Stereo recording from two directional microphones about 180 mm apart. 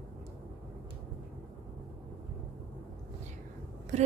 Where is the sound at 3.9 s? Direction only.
40° right (ahead or behind).